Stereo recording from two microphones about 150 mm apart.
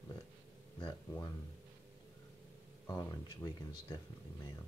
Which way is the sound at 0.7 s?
30° left (ahead or behind).